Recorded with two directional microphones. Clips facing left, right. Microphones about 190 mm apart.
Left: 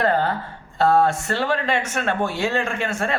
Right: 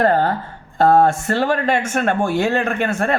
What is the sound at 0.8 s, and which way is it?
A man's voice, 50° right (ahead or behind).